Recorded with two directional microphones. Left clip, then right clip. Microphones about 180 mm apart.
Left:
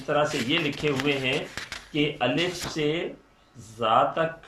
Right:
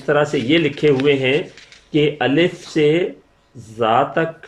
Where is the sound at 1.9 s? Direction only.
45° right (ahead or behind).